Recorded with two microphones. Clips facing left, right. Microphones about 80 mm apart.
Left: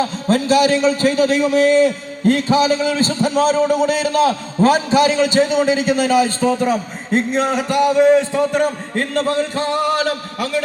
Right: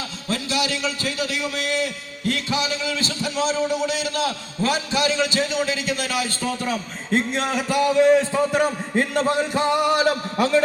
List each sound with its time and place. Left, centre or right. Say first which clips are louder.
0.0 s a man's voice: left 11 dB; left
7.1 s a man's voice: left 5 dB; centre; by 10.6 s right